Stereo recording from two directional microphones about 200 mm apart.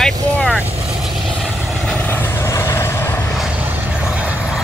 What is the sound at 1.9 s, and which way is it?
Vehicle, 10° left (ahead or behind).